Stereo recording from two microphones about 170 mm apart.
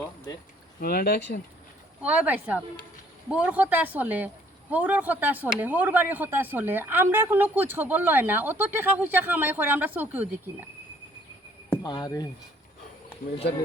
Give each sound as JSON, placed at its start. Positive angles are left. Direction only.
{"t": 0.8, "sound": "speech", "side_deg": 65}
{"t": 2.0, "sound": "speech", "side_deg": -10}
{"t": 11.8, "sound": "speech", "side_deg": 20}